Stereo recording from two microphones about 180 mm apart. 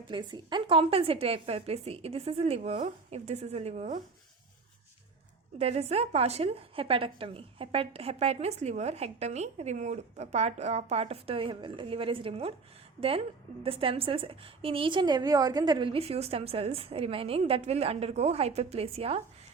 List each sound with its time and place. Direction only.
0.1 s a woman's voice: 25° right (ahead or behind)
5.5 s a woman's voice: 35° right (ahead or behind)